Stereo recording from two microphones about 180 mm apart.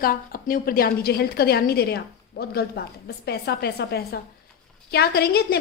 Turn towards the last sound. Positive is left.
turn(degrees=60)  # may be behind; listen again after turning